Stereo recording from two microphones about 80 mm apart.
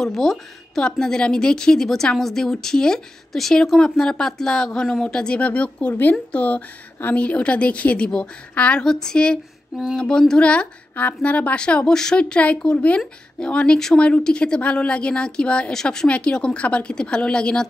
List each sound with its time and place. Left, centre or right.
0.0 s a woman's voice: centre